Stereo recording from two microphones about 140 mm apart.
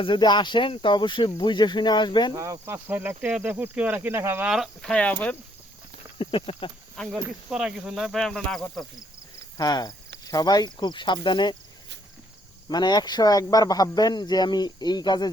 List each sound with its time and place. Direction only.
0.0 s speech: 35° left (ahead or behind)
2.3 s speech: 25° right (ahead or behind)
4.4 s speech: 5° right (ahead or behind)
6.1 s speech: 40° left (ahead or behind)
6.9 s speech: 5° left (ahead or behind)
9.6 s speech: 30° left (ahead or behind)
12.6 s speech: 30° left (ahead or behind)